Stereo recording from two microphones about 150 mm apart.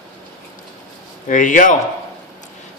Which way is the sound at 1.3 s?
60° left (ahead or behind).